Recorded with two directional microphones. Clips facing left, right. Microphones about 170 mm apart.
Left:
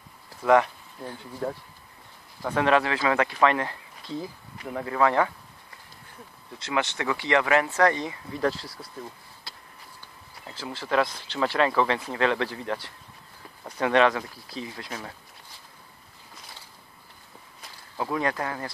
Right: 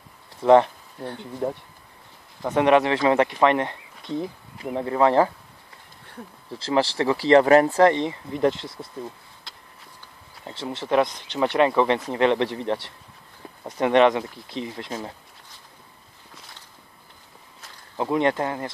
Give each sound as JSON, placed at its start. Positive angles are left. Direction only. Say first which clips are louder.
{"t": 0.3, "sound": "speech", "louder": "right 5 dB", "side_deg": -30}
{"t": 6.5, "sound": "speech", "louder": "right 6 dB", "side_deg": -30}
{"t": 10.4, "sound": "speech", "louder": "right 5 dB", "side_deg": -25}
{"t": 17.9, "sound": "speech", "louder": "right 6 dB", "side_deg": -25}